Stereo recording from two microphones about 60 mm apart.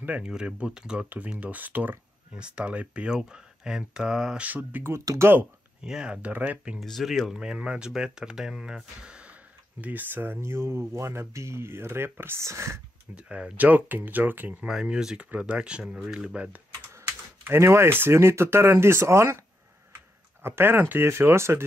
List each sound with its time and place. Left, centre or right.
0.2 s speech: centre
1.3 s speech: right
2.3 s speech: centre
4.4 s speech: right
5.9 s speech: centre
6.8 s speech: centre; by 10.4 s right
10.4 s speech: right
12.4 s speech: right
13.1 s speech: right
14.7 s speech: centre
16.0 s speech: centre
17.5 s speech: right
20.4 s speech: right